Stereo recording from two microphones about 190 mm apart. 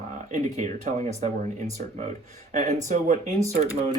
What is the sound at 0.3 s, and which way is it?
Speech, 40° right (ahead or behind).